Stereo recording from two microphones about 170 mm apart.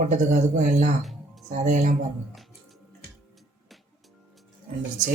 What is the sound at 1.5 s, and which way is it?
Speech, 45° right (ahead or behind).